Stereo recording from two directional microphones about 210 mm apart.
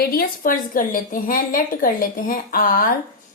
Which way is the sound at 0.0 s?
45° left (ahead or behind).